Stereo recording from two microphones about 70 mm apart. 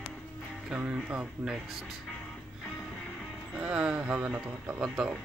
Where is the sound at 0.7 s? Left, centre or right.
Centre.